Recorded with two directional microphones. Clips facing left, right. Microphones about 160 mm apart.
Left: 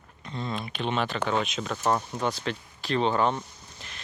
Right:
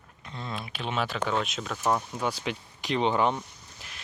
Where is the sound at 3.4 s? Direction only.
5° right (ahead or behind).